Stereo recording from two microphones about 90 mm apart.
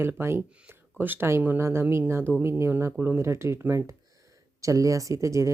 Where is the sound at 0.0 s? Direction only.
25° right (ahead or behind).